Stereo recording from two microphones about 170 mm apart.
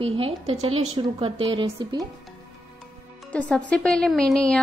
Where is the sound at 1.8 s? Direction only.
20° right (ahead or behind).